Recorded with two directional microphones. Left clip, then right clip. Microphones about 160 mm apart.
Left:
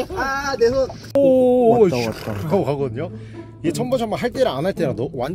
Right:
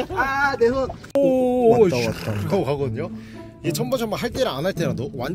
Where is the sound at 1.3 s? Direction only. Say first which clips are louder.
Left 3 dB; 70° left (ahead or behind).